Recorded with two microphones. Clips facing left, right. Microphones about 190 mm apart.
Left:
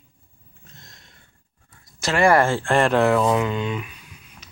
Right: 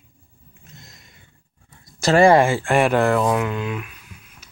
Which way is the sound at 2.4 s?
10° right (ahead or behind).